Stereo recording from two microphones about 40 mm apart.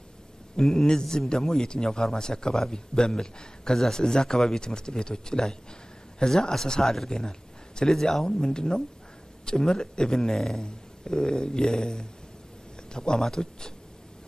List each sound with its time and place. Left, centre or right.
0.6 s speech: centre